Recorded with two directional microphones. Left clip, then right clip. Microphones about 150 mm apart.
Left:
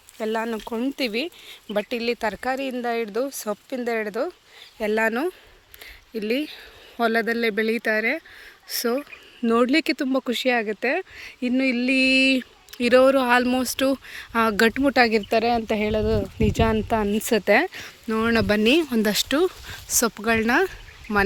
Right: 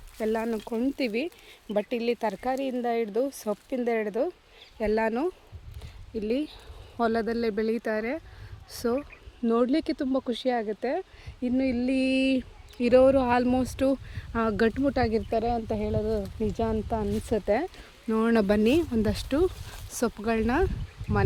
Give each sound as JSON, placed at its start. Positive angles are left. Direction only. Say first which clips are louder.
{"t": 0.2, "sound": "speech", "louder": "left 2 dB", "side_deg": -5}
{"t": 4.8, "sound": "speech", "louder": "left 4 dB", "side_deg": 0}
{"t": 9.4, "sound": "speech", "louder": "left 5 dB", "side_deg": 15}
{"t": 14.7, "sound": "speech", "louder": "left 7 dB", "side_deg": 15}
{"t": 18.1, "sound": "speech", "louder": "left 3 dB", "side_deg": -10}
{"t": 18.6, "sound": "speech", "louder": "left 5 dB", "side_deg": 0}